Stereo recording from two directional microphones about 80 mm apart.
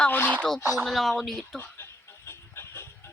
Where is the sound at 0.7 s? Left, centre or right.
Centre.